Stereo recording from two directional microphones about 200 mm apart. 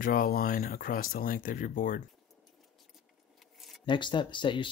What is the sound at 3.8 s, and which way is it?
Speech, 25° left (ahead or behind).